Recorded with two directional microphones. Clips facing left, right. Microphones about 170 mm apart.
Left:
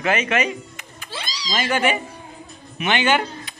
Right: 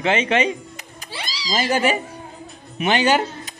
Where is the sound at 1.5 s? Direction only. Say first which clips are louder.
Right 1 dB; 35° right (ahead or behind).